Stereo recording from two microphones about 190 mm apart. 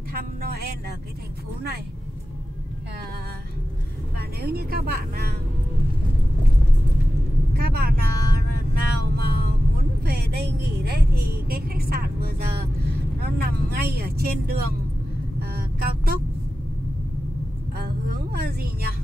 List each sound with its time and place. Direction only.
0.1 s a woman's voice: 55° right (ahead or behind)
4.2 s a woman's voice: 55° right (ahead or behind)
7.5 s speech: 55° right (ahead or behind)
10.0 s a sound: 50° right (ahead or behind)
10.9 s a woman's voice: 55° right (ahead or behind)
15.4 s vehicle: 55° right (ahead or behind)
17.7 s a sound: 55° right (ahead or behind)